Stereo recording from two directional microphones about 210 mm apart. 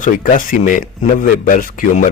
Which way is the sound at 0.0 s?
40° left (ahead or behind).